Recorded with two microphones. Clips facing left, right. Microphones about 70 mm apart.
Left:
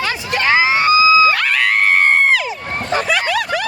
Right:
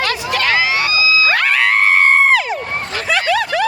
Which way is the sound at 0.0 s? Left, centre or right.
Centre.